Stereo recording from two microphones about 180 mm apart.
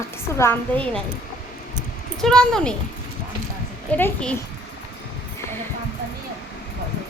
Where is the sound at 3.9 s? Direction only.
10° left (ahead or behind).